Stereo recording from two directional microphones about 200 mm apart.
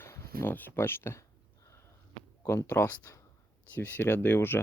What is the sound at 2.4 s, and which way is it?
Speech, 15° left (ahead or behind).